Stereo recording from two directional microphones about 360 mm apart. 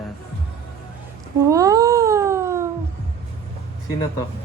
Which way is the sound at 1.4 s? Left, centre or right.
Centre.